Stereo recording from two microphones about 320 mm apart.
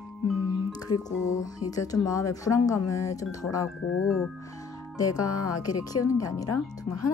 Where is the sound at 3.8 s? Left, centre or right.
Left.